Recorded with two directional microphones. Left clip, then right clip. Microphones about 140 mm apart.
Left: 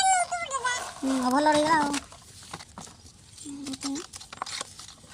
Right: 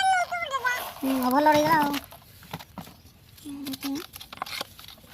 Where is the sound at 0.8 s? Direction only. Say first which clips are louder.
Right 1 dB; 10° right (ahead or behind).